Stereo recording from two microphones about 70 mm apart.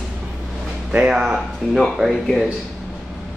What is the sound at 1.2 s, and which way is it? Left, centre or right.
Speech, centre.